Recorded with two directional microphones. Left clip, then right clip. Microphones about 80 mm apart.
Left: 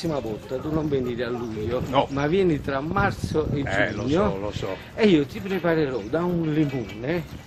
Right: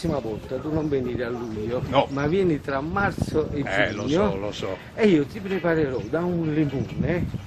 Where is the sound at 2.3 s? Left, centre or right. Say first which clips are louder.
Left 1 dB; left.